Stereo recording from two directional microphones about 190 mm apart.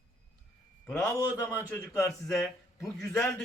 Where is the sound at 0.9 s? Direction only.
5° left (ahead or behind).